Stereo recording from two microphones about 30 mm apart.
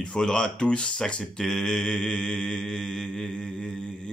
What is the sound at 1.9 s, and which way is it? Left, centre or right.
Mantra, left.